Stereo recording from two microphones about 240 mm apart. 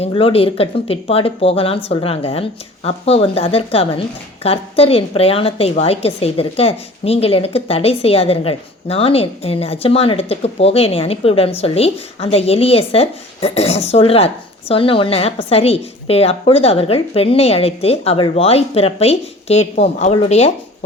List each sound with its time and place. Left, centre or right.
0.0 s speech: left